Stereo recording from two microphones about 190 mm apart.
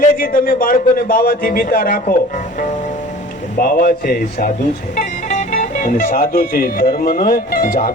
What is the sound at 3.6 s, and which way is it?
Speech, 50° left (ahead or behind).